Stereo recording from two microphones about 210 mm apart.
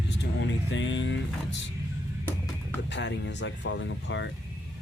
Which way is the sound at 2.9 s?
60° left (ahead or behind).